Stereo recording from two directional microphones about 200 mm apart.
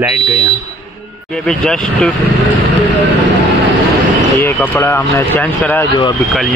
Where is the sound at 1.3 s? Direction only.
Centre (ahead or behind).